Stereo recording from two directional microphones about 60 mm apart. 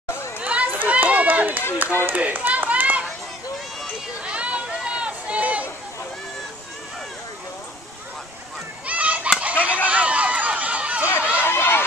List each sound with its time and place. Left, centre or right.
0.4 s run: right
4.2 s a sound: centre
8.8 s fowl: right
9.8 s run: right
11.1 s run: left
11.4 s a sound: left